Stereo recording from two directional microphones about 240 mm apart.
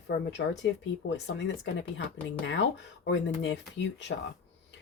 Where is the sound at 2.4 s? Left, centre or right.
Left.